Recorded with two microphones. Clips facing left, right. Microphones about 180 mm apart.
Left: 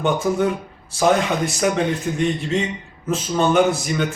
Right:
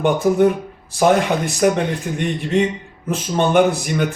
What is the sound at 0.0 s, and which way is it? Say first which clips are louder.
Speech: right 5 dB; 55° right (ahead or behind).